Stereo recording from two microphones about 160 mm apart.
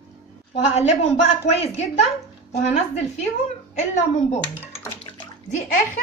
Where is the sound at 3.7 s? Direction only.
50° left (ahead or behind).